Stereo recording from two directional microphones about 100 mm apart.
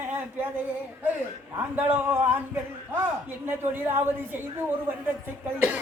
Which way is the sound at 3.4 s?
20° right (ahead or behind).